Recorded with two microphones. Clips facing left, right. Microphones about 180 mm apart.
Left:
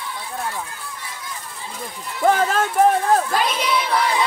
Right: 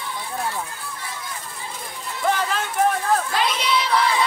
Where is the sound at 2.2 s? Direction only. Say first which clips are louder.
Left 6 dB; 45° left (ahead or behind).